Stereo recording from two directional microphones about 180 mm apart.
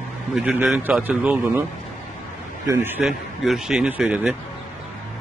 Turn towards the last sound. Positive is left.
turn(degrees=-5)  # may be behind; listen again after turning